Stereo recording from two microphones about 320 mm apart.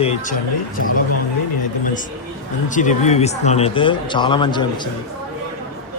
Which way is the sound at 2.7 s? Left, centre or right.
Left.